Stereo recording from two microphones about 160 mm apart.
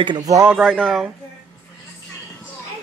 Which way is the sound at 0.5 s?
5° left (ahead or behind).